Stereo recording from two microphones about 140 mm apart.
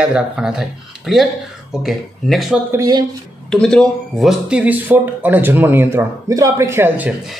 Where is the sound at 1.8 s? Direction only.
Centre (ahead or behind).